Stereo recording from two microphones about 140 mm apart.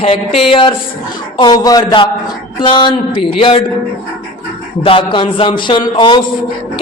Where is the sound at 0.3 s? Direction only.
40° left (ahead or behind).